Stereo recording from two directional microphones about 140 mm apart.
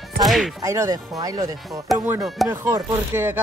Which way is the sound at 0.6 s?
20° right (ahead or behind).